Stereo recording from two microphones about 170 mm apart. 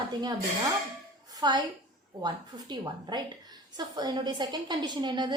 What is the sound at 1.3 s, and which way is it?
Music, 25° right (ahead or behind).